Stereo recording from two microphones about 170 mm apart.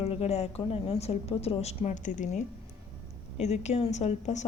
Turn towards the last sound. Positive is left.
turn(degrees=40)  # may be behind; listen again after turning